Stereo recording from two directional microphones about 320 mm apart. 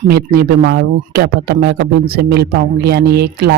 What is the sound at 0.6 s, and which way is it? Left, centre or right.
Speech, right.